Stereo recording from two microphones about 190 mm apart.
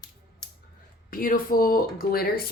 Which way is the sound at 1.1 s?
50° left (ahead or behind).